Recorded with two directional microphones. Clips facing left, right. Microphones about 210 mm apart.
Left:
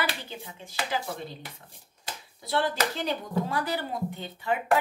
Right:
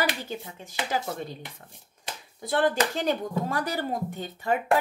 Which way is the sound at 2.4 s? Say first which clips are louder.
Right 3 dB; 50° right (ahead or behind).